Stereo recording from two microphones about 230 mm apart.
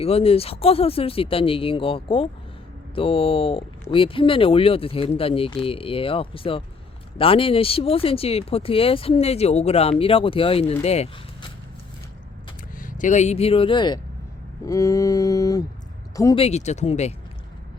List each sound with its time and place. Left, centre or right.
0.0 s speech: left
12.8 s speech: left; by 14.0 s centre
14.6 s mantra: centre
16.4 s speech: left